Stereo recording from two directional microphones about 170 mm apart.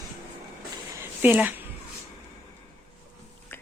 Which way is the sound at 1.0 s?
10° right (ahead or behind).